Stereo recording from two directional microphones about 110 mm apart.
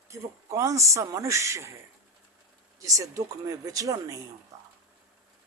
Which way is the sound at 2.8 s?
30° right (ahead or behind).